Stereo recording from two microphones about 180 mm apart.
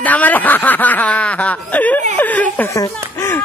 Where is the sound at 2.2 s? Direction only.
10° left (ahead or behind).